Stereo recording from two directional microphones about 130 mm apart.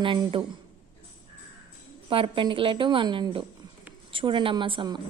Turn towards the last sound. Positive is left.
turn(degrees=-35)  # may be behind; listen again after turning